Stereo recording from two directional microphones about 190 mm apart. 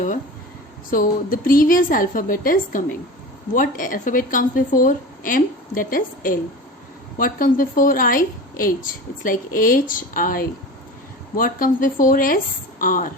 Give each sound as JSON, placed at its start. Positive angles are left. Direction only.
{"t": 0.9, "sound": "a woman's voice", "side_deg": 50}